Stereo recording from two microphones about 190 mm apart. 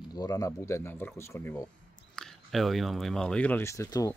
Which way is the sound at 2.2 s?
Centre (ahead or behind).